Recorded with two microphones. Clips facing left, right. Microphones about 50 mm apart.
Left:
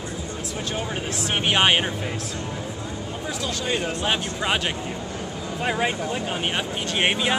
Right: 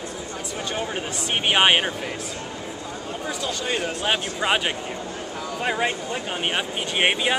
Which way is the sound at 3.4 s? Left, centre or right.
Centre.